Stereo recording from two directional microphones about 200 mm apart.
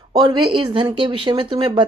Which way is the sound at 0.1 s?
20° right (ahead or behind).